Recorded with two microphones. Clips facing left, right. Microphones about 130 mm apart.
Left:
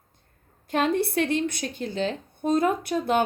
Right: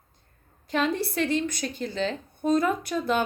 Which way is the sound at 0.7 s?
55° left (ahead or behind).